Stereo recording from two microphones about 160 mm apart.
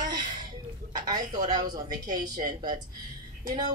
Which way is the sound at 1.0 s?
25° right (ahead or behind).